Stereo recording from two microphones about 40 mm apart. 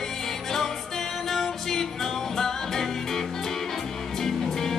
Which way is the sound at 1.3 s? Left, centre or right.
Centre.